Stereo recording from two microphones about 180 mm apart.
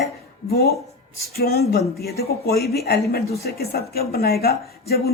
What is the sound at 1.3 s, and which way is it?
Speech, 60° left (ahead or behind).